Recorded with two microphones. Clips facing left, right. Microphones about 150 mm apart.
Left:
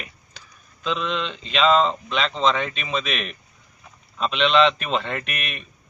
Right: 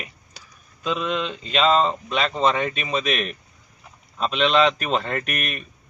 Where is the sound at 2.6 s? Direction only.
45° right (ahead or behind).